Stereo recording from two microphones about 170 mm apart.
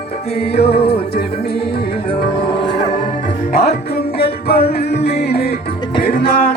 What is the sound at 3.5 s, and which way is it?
Music, 65° left (ahead or behind).